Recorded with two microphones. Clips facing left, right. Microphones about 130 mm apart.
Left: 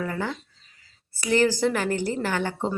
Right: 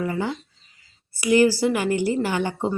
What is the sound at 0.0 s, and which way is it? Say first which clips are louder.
A woman's voice: right 3 dB; 15° right (ahead or behind).